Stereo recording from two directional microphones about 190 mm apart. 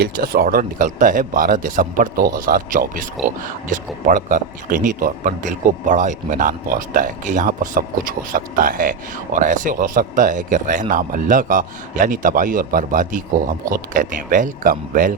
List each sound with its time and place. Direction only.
0.0 s speech: 50° right (ahead or behind)